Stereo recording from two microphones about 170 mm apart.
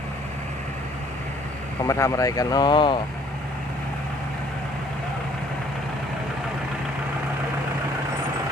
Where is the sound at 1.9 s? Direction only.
20° left (ahead or behind).